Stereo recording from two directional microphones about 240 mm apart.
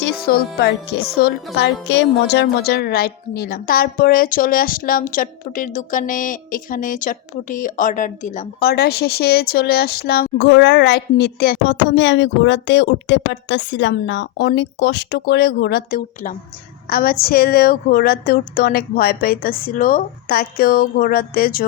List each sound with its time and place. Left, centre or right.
0.0 s a woman's voice: left